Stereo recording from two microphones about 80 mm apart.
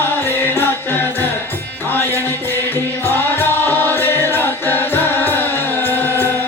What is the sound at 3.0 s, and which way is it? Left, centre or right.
Music, left.